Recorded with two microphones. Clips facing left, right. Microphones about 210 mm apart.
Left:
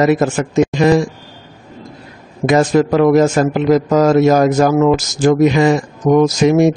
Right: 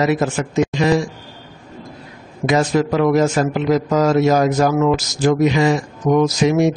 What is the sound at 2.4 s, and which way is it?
A man's voice, 55° left (ahead or behind).